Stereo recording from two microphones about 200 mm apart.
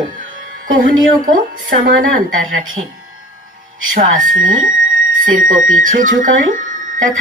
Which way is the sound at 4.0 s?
40° right (ahead or behind).